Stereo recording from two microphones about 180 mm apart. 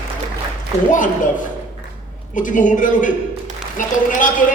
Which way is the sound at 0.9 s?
45° left (ahead or behind).